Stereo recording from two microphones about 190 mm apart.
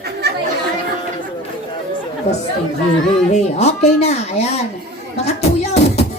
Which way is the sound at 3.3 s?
35° left (ahead or behind).